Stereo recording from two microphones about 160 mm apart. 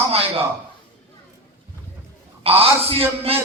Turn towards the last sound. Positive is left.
turn(degrees=-40)  # may be behind; listen again after turning